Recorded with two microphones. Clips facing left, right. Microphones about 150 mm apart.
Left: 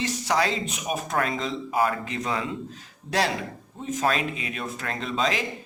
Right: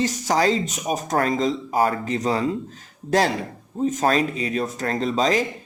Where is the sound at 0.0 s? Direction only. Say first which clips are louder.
Right 5 dB; 40° right (ahead or behind).